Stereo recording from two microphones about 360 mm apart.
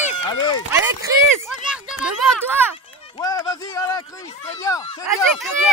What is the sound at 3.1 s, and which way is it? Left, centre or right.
Speech, centre.